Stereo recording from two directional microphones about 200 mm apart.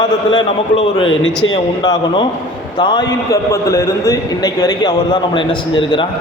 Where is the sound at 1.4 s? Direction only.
80° left.